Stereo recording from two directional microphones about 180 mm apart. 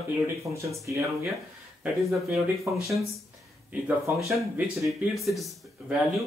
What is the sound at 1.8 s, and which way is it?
Speech, centre (ahead or behind).